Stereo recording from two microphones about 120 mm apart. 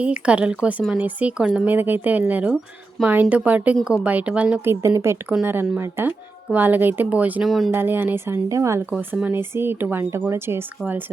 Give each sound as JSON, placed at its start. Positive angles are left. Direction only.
{"t": 0.0, "sound": "speech", "side_deg": -10}
{"t": 4.7, "sound": "speech", "side_deg": -25}
{"t": 7.4, "sound": "speech", "side_deg": 0}
{"t": 7.7, "sound": "speech", "side_deg": -20}